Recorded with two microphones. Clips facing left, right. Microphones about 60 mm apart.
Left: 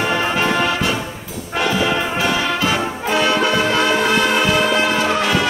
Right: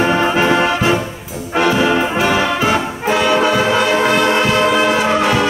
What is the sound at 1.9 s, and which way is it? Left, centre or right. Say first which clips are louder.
Brass instrument: right 4 dB; right.